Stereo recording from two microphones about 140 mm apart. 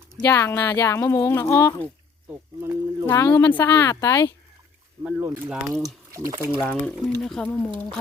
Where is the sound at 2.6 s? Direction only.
20° right (ahead or behind).